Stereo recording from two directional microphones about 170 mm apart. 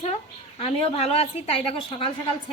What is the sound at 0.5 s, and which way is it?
A woman's voice, 35° left (ahead or behind).